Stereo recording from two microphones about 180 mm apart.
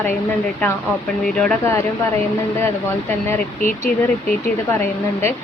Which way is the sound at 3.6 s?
50° left (ahead or behind).